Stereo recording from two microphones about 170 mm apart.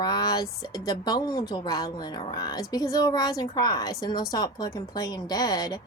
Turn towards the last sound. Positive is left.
turn(degrees=25)  # may be behind; listen again after turning